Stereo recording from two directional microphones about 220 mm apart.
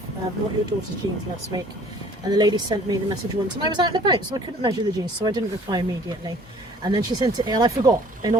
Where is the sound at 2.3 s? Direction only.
20° right (ahead or behind).